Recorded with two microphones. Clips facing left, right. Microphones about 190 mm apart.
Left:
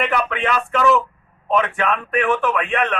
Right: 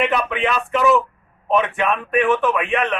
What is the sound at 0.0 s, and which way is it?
A man's voice, 15° right (ahead or behind).